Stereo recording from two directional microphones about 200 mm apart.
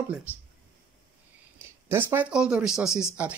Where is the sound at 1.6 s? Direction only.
10° right (ahead or behind).